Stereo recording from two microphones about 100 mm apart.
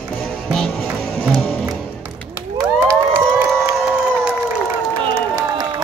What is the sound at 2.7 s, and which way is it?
Cheering, 25° right (ahead or behind).